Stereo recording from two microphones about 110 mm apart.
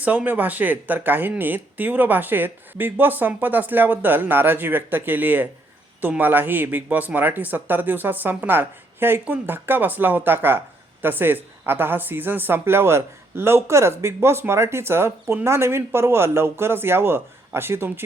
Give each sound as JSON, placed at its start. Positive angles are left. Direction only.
{"t": 0.0, "sound": "speech", "side_deg": -15}